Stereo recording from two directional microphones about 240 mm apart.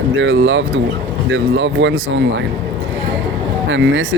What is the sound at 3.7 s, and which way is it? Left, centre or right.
Speech, right.